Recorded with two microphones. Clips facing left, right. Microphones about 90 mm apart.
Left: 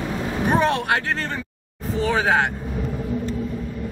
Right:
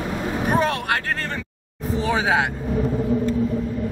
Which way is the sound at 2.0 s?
5° right (ahead or behind).